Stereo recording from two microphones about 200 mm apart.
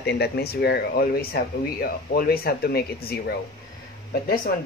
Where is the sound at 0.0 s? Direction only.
55° left (ahead or behind).